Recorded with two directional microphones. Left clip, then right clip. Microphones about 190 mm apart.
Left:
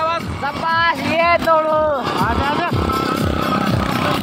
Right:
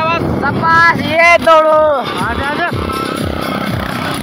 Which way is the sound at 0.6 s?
25° right (ahead or behind).